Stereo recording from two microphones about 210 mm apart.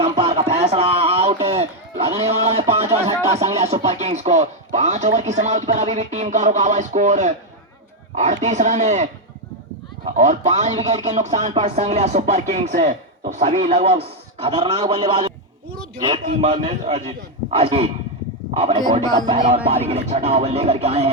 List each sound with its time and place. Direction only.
0.0 s a sound: 30° right (ahead or behind)
3.3 s speech: 30° right (ahead or behind)
10.2 s a man's voice: 35° right (ahead or behind); by 16.2 s 20° right (ahead or behind)
16.4 s a man's voice: 30° right (ahead or behind)